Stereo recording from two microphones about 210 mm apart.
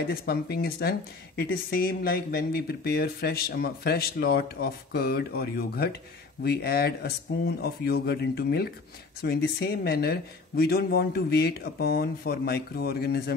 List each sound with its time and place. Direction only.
0.1 s speech: 45° left (ahead or behind)